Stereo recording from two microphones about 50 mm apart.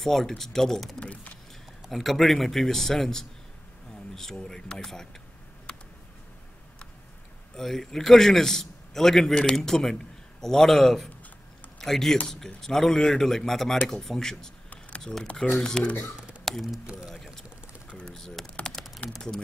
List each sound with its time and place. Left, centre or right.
0.0 s a man's voice: centre
0.9 s a sound: left
1.9 s a man's voice: centre
5.7 s a sound: left
7.5 s a man's voice: centre
14.7 s typing: left
15.6 s a man's voice: centre
16.2 s tick-tock: right
16.6 s speech: centre
17.8 s typing: left
18.1 s typing: centre